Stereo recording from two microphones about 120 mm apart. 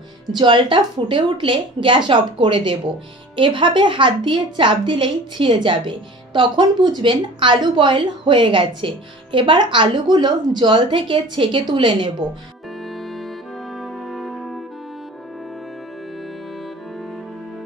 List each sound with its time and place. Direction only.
0.3 s a woman's voice: 40° right (ahead or behind)
12.8 s music: centre (ahead or behind)